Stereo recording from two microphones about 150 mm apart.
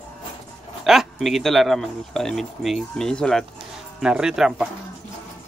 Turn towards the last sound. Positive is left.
turn(degrees=-5)  # may be behind; listen again after turning